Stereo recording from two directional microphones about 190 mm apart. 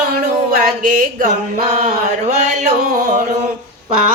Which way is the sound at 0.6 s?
45° right (ahead or behind).